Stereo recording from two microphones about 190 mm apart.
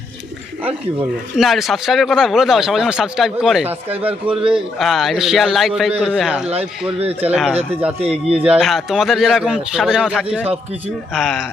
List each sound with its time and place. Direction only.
1.4 s speech: centre (ahead or behind)
4.4 s speech: 30° right (ahead or behind)
4.8 s speech: centre (ahead or behind)
7.0 s speech: 30° right (ahead or behind)
7.3 s speech: 5° right (ahead or behind)
8.0 s speech: 30° right (ahead or behind)
8.4 s speech: centre (ahead or behind)